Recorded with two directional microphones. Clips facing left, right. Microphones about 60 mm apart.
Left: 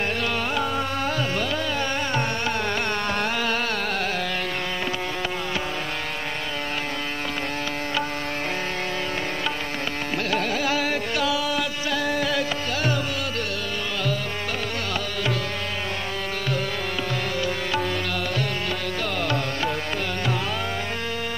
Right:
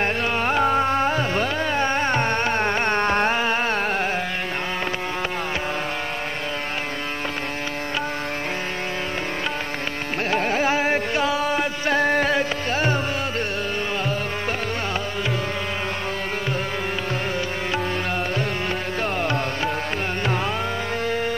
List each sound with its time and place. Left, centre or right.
0.0 s music: right
10.3 s carnatic music: right
19.1 s music: right